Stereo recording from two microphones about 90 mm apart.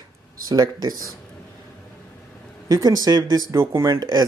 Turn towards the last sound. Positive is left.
turn(degrees=-50)  # may be behind; listen again after turning